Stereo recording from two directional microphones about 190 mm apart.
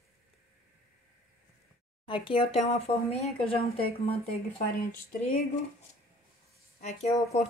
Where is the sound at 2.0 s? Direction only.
25° left (ahead or behind).